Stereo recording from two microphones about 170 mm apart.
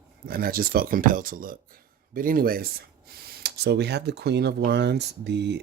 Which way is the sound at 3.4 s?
75° right (ahead or behind).